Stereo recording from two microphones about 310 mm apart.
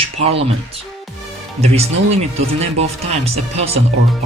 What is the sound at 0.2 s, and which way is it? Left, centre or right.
Speech, centre.